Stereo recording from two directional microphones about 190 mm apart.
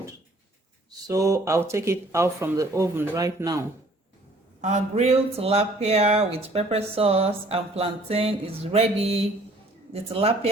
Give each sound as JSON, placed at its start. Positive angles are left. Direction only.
{"t": 0.9, "sound": "speech", "side_deg": -20}
{"t": 4.6, "sound": "speech", "side_deg": -35}